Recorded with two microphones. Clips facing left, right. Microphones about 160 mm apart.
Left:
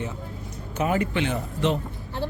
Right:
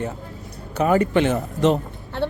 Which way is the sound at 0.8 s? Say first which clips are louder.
Right 6 dB; 40° right (ahead or behind).